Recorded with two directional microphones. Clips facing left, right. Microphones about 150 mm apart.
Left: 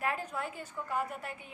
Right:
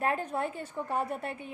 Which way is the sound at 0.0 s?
30° right (ahead or behind).